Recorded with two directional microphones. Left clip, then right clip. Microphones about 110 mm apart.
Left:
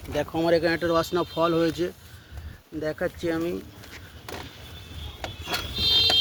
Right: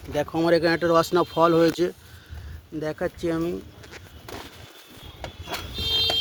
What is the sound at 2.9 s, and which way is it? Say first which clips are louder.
Speech: even; 60° right (ahead or behind).